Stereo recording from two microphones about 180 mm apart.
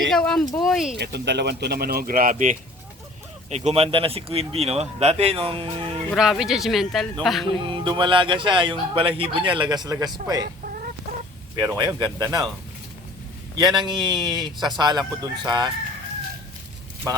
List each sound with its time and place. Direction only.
0.0 s speech: centre (ahead or behind)
0.9 s speech: 70° right (ahead or behind); by 6.0 s 30° right (ahead or behind)
6.1 s speech: 5° right (ahead or behind)
7.6 s speech: 25° right (ahead or behind)
11.5 s speech: 20° right (ahead or behind)
13.6 s speech: 25° right (ahead or behind)